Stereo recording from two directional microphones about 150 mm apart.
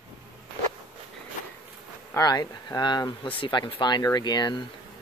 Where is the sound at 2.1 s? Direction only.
25° left (ahead or behind).